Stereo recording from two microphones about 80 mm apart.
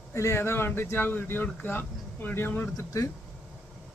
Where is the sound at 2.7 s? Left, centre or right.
Left.